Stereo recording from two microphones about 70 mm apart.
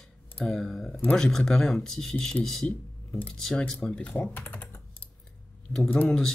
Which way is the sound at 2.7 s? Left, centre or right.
Left.